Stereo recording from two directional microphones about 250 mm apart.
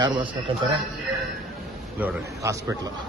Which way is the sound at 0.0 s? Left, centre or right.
Centre.